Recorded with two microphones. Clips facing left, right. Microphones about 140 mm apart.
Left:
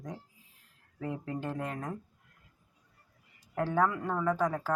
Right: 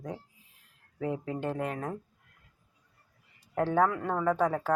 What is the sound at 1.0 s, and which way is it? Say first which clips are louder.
Speech: right 4 dB; 5° right (ahead or behind).